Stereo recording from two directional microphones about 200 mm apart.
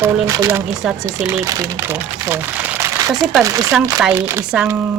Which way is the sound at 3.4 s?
15° right (ahead or behind).